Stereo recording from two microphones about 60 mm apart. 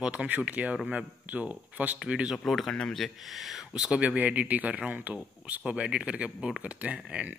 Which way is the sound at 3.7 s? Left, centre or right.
Centre.